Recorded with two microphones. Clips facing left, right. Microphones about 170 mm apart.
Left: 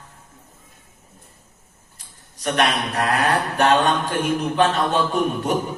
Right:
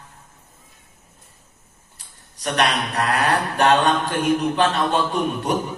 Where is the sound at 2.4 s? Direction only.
40° left (ahead or behind).